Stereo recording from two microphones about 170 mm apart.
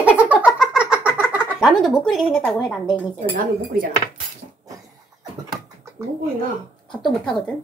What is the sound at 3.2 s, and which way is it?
Speech, 60° right (ahead or behind).